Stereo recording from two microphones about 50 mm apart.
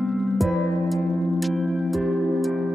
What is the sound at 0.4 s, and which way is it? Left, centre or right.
Music, centre.